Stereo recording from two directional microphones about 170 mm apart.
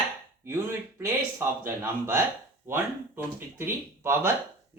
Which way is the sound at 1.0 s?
15° right (ahead or behind).